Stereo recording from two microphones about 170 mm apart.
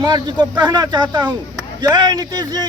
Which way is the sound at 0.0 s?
25° right (ahead or behind).